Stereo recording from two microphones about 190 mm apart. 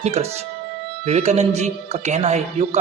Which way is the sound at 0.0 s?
35° right (ahead or behind).